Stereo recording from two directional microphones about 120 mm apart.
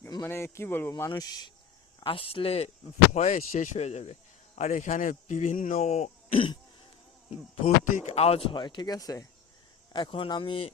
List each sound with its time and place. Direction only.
0.2 s speech: 20° left (ahead or behind)
2.0 s speech: 50° left (ahead or behind)
3.1 s speech: 85° left
6.3 s speech: 45° left (ahead or behind)
7.3 s speech: 70° left (ahead or behind); by 9.2 s 30° left (ahead or behind)
9.9 s speech: 45° left (ahead or behind)